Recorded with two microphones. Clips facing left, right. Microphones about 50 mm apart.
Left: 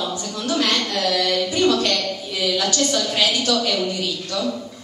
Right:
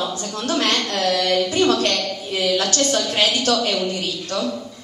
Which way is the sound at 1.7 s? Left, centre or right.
Right.